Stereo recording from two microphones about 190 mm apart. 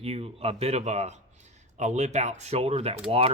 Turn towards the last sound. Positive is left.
turn(degrees=-35)  # may be behind; listen again after turning